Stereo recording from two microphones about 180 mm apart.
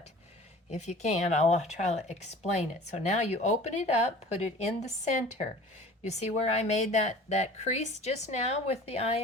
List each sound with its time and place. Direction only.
0.7 s speech: 40° left (ahead or behind)